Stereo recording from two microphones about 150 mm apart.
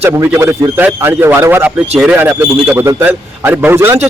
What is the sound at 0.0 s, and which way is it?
A man's voice, 15° right (ahead or behind).